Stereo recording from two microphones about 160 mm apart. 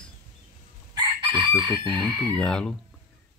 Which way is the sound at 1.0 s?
30° right (ahead or behind).